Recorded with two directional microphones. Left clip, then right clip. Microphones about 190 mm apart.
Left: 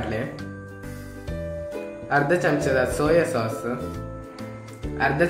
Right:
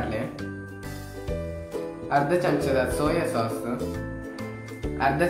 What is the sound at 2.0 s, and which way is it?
A man's voice, 15° left (ahead or behind).